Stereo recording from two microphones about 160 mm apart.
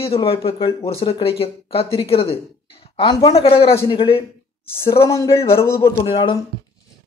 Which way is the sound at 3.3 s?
35° left (ahead or behind).